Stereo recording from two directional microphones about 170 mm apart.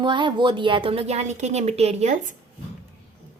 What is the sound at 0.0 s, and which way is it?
Speech, 30° right (ahead or behind).